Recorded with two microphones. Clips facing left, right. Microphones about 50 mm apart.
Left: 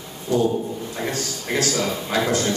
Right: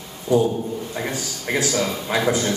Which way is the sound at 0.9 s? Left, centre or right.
Centre.